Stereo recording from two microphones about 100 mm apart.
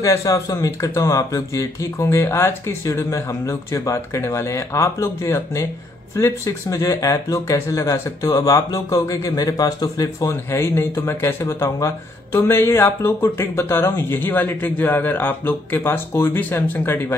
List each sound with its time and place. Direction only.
0.0 s speech: 30° left (ahead or behind)